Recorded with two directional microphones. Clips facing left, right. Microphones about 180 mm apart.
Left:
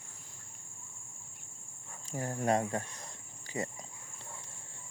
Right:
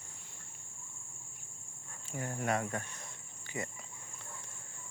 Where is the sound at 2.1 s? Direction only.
35° left (ahead or behind).